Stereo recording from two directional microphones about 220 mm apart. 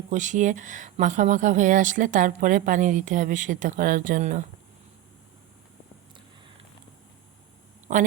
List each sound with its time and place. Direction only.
0.1 s speech: 35° right (ahead or behind)
7.9 s speech: 35° right (ahead or behind)